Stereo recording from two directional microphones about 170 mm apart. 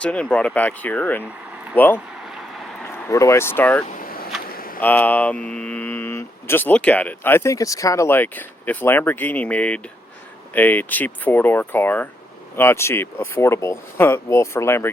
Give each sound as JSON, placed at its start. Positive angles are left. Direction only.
{"t": 0.0, "sound": "speech", "side_deg": 5}
{"t": 3.9, "sound": "vehicle", "side_deg": 60}
{"t": 4.4, "sound": "a sound", "side_deg": 60}
{"t": 4.8, "sound": "speech", "side_deg": 10}